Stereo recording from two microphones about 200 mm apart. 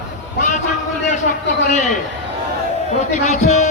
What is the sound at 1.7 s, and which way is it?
Speech, 35° left (ahead or behind).